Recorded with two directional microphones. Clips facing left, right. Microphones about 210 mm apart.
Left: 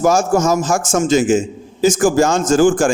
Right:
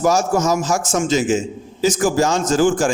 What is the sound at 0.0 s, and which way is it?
A man's voice, 50° left (ahead or behind).